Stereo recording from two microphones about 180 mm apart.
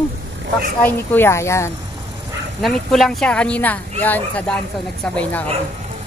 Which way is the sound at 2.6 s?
Centre (ahead or behind).